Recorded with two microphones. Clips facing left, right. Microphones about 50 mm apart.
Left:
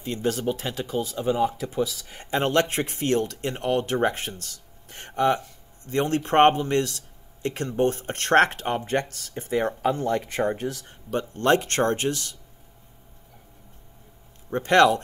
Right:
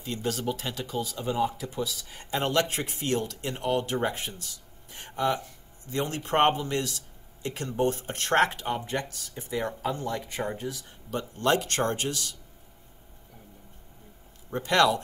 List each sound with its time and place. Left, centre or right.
0.0 s speech: left
14.5 s speech: left